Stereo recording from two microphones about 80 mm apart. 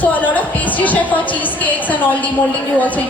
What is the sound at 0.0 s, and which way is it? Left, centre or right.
A woman's voice, centre.